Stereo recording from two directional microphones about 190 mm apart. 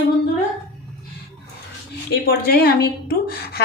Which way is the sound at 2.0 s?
55° left (ahead or behind).